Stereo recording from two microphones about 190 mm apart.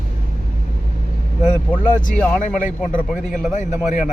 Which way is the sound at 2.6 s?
45° left (ahead or behind).